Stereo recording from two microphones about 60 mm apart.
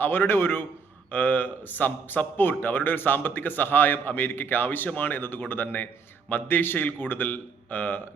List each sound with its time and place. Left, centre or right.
0.0 s a man's voice: left